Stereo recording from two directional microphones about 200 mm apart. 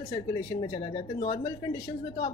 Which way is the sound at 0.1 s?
20° left (ahead or behind).